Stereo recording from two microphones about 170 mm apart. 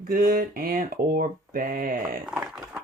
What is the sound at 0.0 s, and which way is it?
Speech, 55° right (ahead or behind).